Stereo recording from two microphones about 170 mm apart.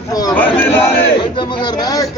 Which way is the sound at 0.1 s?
20° left (ahead or behind).